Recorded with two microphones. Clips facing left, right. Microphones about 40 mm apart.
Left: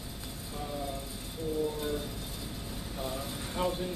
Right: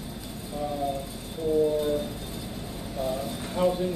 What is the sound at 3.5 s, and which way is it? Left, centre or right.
Speech, centre.